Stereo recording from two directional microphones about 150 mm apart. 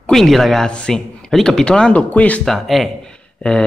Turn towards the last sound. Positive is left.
turn(degrees=5)  # may be behind; listen again after turning